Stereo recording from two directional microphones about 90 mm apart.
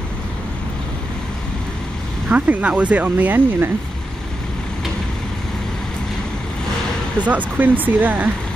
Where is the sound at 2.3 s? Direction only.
15° right (ahead or behind).